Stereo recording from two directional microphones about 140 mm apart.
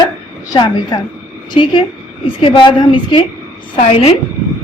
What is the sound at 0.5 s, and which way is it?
A woman's voice, 30° left (ahead or behind).